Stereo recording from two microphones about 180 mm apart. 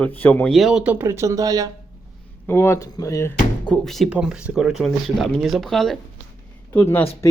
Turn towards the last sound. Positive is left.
turn(degrees=10)  # may be behind; listen again after turning